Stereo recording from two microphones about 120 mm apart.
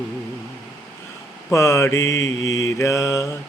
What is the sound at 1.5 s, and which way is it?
Mantra, 25° left (ahead or behind).